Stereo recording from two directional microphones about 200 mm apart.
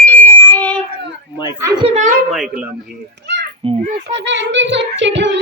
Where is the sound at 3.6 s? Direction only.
25° right (ahead or behind).